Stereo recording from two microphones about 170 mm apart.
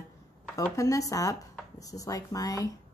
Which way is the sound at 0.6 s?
20° left (ahead or behind).